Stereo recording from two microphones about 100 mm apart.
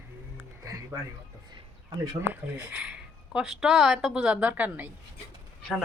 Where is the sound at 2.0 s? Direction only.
35° right (ahead or behind).